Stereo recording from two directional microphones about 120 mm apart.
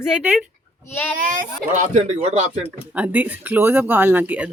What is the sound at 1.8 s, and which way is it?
Speech, 90° right.